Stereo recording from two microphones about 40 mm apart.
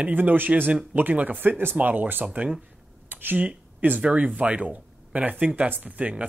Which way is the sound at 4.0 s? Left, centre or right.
Right.